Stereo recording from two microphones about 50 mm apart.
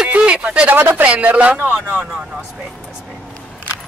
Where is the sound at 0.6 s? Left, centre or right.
Right.